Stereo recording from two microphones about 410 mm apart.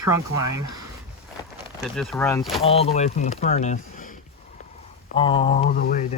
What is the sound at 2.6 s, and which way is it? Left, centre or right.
Speech, centre.